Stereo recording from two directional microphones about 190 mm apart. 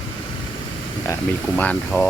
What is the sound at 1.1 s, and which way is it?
Speech, 10° left (ahead or behind).